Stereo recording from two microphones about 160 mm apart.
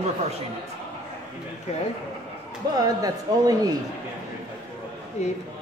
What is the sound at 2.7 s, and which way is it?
Speech, 25° right (ahead or behind).